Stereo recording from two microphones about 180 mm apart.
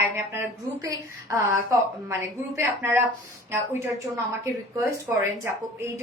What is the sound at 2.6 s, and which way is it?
Speech, 15° right (ahead or behind).